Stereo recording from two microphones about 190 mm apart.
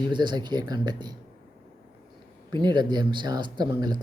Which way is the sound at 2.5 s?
25° right (ahead or behind).